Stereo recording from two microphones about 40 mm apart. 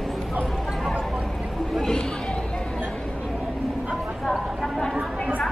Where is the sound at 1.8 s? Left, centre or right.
Centre.